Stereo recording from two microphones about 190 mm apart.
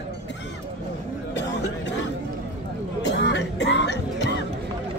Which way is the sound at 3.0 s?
70° left (ahead or behind).